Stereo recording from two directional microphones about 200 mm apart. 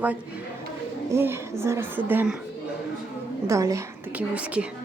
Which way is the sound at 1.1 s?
15° right (ahead or behind).